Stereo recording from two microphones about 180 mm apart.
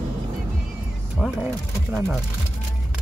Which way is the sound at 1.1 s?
5° right (ahead or behind).